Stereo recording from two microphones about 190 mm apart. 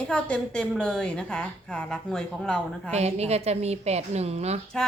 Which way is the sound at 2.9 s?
35° right (ahead or behind).